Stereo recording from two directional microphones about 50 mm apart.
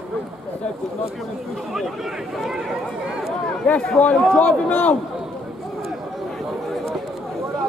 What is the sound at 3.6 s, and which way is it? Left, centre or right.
A man's voice, centre.